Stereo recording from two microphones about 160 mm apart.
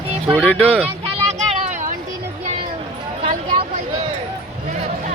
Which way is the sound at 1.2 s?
40° right (ahead or behind).